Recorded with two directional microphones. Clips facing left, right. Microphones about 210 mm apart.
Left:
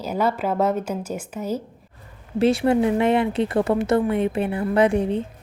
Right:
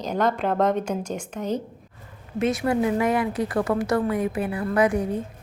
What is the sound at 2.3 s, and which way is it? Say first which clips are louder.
Speech: left 4 dB; 30° left (ahead or behind).